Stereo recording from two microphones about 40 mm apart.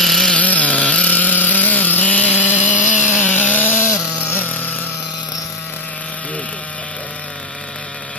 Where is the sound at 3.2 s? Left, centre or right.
Left.